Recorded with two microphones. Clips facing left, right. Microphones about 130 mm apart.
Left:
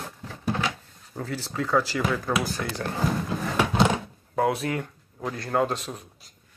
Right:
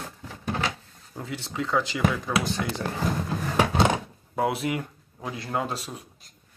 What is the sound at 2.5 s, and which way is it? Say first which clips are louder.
Speech: right 2 dB; 20° right (ahead or behind).